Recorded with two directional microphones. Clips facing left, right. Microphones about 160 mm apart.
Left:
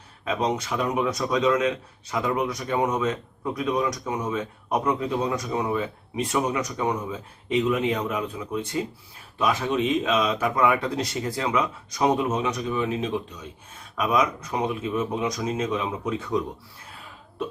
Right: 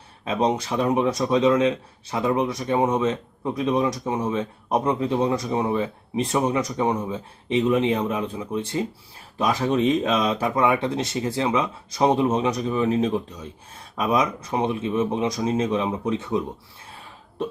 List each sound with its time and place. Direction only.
0.3 s speech: 30° right (ahead or behind)